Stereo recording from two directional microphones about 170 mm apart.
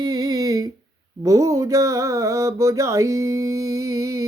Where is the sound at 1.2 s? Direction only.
20° right (ahead or behind).